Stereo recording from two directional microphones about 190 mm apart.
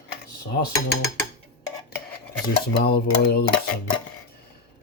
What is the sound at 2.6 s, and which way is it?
Dishes, 55° left (ahead or behind).